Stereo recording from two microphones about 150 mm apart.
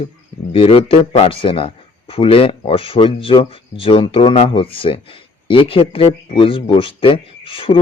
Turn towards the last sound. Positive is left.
turn(degrees=35)  # may be behind; listen again after turning